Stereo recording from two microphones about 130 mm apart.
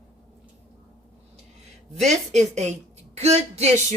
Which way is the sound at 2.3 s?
60° right (ahead or behind).